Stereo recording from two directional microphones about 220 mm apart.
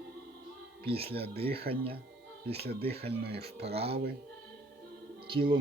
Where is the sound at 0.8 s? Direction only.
25° right (ahead or behind).